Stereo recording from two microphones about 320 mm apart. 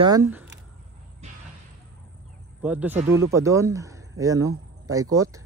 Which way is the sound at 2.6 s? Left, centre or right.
Centre.